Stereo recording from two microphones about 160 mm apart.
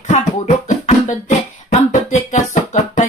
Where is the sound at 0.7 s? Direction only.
45° left (ahead or behind).